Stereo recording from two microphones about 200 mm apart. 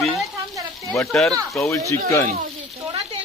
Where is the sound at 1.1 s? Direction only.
5° left (ahead or behind).